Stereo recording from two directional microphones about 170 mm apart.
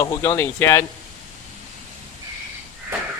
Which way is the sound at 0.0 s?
15° left (ahead or behind).